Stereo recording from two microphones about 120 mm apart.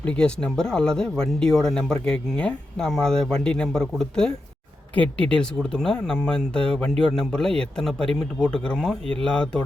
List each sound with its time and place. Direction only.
0.0 s speech: 10° left (ahead or behind)